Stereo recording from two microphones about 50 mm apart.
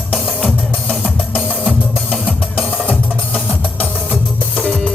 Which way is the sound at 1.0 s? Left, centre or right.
Centre.